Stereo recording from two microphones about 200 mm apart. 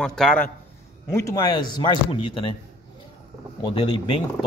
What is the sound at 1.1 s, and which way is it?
Speech, 15° left (ahead or behind).